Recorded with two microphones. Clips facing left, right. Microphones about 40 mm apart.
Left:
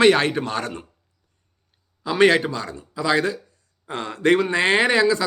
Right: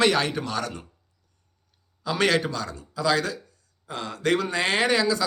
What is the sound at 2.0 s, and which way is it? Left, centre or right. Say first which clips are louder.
Speech: left 6 dB; left.